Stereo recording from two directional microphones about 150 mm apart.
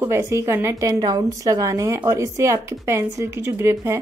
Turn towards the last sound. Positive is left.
turn(degrees=-20)  # may be behind; listen again after turning